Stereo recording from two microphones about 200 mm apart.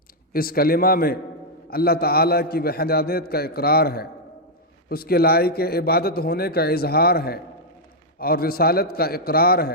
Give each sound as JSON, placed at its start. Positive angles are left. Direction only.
{"t": 0.3, "sound": "a man's voice", "side_deg": 50}